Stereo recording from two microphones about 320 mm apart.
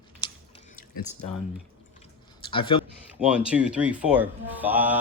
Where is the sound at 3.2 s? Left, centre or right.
Centre.